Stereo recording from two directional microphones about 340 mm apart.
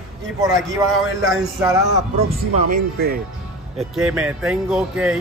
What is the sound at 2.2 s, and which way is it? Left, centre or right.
Speech, right.